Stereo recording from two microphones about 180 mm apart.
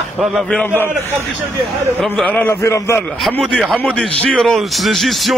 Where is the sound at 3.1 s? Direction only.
Centre (ahead or behind).